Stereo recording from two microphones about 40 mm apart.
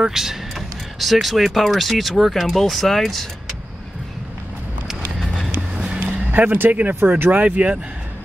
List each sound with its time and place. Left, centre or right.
0.0 s speech: centre
5.2 s vehicle: centre
5.9 s a sound: right
7.2 s speech: right